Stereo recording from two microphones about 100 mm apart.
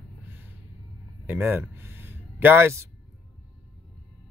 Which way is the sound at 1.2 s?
20° right (ahead or behind).